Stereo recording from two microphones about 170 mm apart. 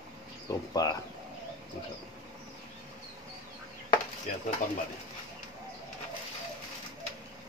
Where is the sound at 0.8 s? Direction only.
20° left (ahead or behind).